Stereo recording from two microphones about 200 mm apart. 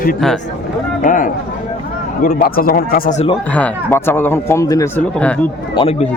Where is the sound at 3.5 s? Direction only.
10° left (ahead or behind).